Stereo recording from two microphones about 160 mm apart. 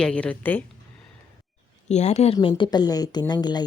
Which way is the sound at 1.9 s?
45° left (ahead or behind).